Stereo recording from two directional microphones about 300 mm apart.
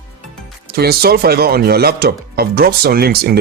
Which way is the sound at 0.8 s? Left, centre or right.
Right.